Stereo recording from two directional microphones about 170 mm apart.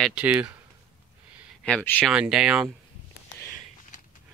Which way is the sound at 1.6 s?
5° left (ahead or behind).